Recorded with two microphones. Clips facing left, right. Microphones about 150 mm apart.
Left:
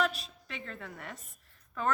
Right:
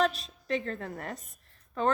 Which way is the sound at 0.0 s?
35° right (ahead or behind).